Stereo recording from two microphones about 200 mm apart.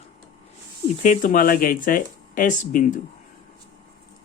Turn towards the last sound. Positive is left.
turn(degrees=40)  # may be behind; listen again after turning